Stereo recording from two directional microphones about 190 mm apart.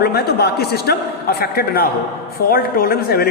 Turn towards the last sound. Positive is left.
turn(degrees=55)  # may be behind; listen again after turning